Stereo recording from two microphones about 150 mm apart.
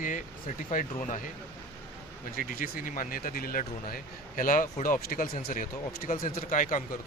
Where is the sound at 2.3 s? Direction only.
70° left (ahead or behind).